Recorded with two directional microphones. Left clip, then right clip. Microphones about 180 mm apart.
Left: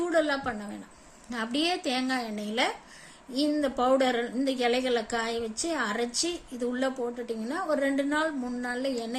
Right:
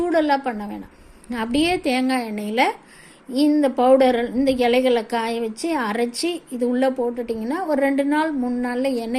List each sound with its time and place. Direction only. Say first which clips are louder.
0.0 s a woman's voice: right 7 dB; 20° right (ahead or behind)